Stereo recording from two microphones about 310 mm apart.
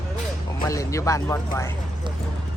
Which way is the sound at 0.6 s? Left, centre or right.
Centre.